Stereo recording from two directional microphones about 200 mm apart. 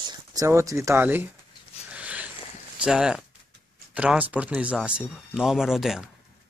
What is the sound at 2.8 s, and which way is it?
Speech, 5° right (ahead or behind).